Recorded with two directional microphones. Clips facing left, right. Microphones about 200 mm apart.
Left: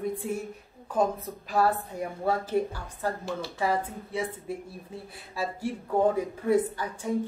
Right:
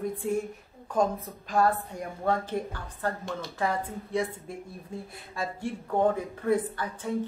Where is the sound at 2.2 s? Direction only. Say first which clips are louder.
Left 2 dB; 10° left (ahead or behind).